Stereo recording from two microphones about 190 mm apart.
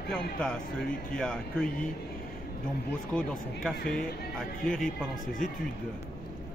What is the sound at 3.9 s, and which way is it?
Speech, 5° left (ahead or behind).